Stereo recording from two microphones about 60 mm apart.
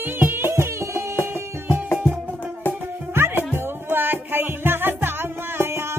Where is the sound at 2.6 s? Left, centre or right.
Left.